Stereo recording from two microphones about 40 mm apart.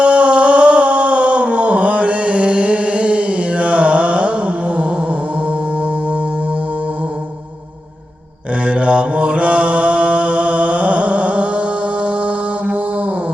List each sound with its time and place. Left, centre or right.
0.0 s a sound: right
5.5 s music: right
8.6 s mantra: right